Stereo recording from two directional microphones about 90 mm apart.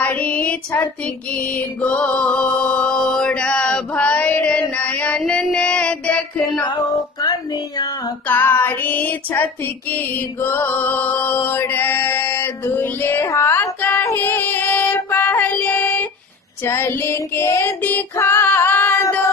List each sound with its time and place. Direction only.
0.0 s child singing: 20° left (ahead or behind)
1.3 s music: 15° left (ahead or behind)
5.2 s child singing: 10° left (ahead or behind)
6.6 s music: 50° left (ahead or behind)
8.3 s music: 25° left (ahead or behind)
16.6 s child singing: 25° left (ahead or behind)
18.1 s female singing: 35° left (ahead or behind)
18.4 s female singing: 20° left (ahead or behind)